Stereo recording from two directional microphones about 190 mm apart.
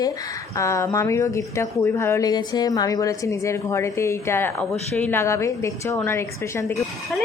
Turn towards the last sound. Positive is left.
turn(degrees=15)  # may be behind; listen again after turning